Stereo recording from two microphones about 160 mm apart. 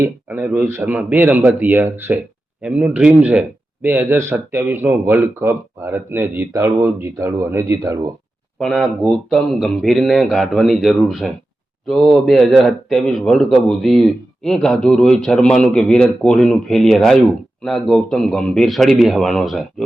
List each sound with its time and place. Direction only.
0.0 s a man's voice: 10° right (ahead or behind)
8.5 s a man's voice: centre (ahead or behind)